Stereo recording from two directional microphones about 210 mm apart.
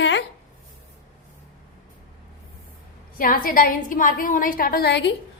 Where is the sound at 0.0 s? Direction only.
60° left (ahead or behind).